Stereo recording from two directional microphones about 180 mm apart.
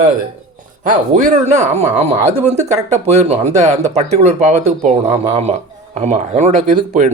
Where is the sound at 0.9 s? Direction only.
45° right (ahead or behind).